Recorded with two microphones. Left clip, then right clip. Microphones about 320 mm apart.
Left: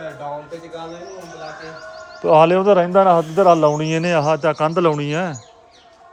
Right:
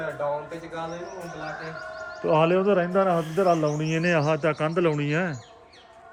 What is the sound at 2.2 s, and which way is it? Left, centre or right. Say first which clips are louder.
Speech: left 9 dB; centre.